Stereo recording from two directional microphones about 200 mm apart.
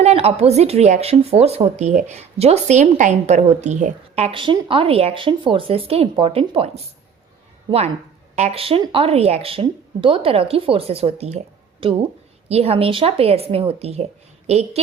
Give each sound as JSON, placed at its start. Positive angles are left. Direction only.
{"t": 0.0, "sound": "speech", "side_deg": -30}
{"t": 8.4, "sound": "speech", "side_deg": -30}